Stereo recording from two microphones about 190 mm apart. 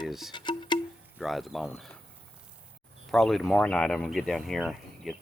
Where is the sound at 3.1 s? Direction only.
Centre (ahead or behind).